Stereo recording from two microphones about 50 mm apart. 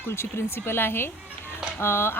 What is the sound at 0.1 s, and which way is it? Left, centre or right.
Speech, left.